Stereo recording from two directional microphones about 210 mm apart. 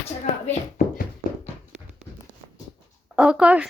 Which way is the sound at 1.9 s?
30° right (ahead or behind).